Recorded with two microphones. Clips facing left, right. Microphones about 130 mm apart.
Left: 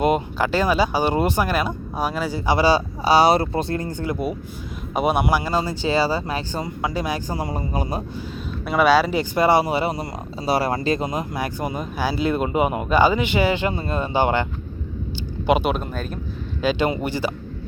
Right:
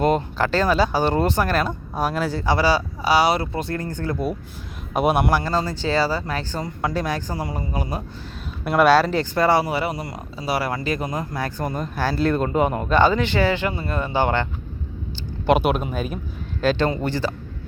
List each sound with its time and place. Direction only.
0.0 s speech: 10° left (ahead or behind)
2.5 s speech: 20° left (ahead or behind)
4.9 s speech: centre (ahead or behind)
6.8 s speech: 5° left (ahead or behind)
7.4 s speech: 25° left (ahead or behind)
8.6 s speech: centre (ahead or behind); by 14.4 s 15° left (ahead or behind)
15.4 s speech: centre (ahead or behind)
16.6 s speech: 5° left (ahead or behind)